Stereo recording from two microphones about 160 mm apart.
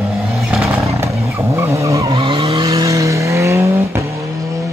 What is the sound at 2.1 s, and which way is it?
Vehicle, 30° right (ahead or behind).